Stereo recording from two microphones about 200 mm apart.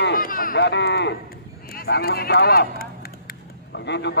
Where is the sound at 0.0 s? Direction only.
45° left (ahead or behind).